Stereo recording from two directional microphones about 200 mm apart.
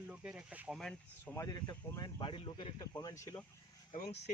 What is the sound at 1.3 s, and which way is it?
Speech, 20° left (ahead or behind).